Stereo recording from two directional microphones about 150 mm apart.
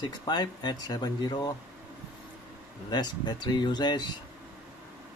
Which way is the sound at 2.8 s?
30° left (ahead or behind).